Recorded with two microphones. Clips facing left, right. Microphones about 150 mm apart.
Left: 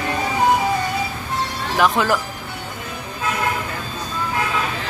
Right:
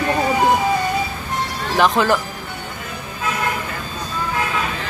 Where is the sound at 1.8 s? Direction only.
5° left (ahead or behind).